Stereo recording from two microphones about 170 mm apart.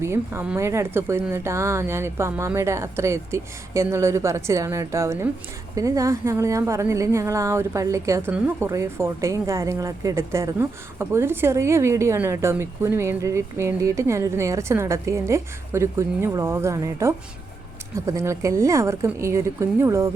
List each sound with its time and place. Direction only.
0.0 s speech: 15° right (ahead or behind)